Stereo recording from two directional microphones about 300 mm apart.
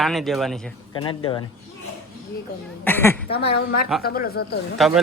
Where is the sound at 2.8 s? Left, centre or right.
Centre.